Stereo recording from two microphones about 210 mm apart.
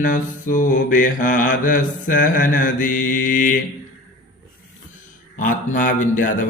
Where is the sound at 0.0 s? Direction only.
40° left (ahead or behind).